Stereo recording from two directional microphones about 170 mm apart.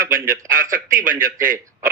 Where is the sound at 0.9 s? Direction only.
50° right (ahead or behind).